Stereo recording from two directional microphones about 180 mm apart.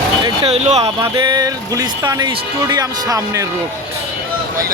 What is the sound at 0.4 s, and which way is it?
Speech, 35° right (ahead or behind).